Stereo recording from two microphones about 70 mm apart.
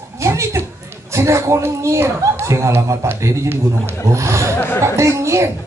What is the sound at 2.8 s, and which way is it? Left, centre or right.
A man's voice, right.